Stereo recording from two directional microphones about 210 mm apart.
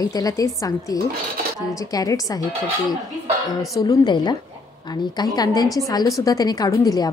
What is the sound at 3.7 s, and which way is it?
A woman's voice, 20° left (ahead or behind).